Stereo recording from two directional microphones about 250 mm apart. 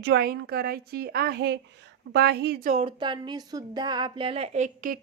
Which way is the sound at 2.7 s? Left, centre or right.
Centre.